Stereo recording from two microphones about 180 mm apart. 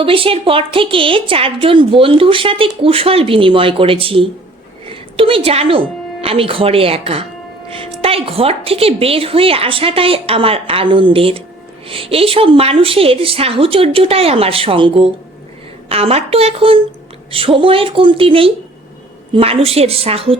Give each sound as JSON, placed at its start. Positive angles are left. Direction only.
{"t": 0.0, "sound": "a woman's voice", "side_deg": -30}